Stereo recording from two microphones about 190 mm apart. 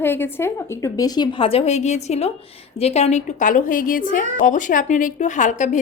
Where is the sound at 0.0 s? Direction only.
10° left (ahead or behind).